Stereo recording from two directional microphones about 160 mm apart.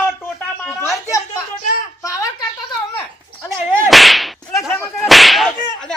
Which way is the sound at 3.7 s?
5° left (ahead or behind).